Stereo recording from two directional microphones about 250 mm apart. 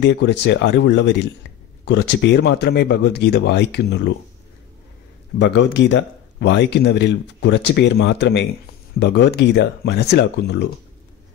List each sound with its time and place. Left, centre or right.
0.0 s speech: left
5.4 s speech: left